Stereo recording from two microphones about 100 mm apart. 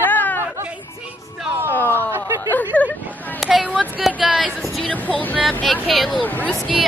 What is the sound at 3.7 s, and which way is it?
Speech, 10° right (ahead or behind).